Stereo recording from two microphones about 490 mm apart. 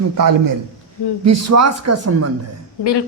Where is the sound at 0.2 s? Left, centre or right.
Right.